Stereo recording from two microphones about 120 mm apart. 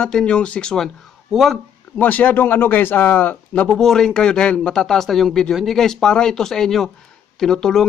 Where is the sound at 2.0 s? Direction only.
10° left (ahead or behind).